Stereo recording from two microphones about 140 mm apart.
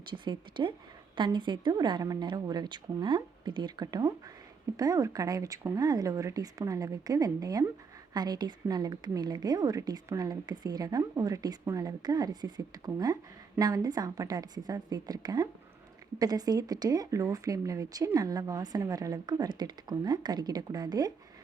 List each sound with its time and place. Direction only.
0.1 s a woman's voice: 35° right (ahead or behind)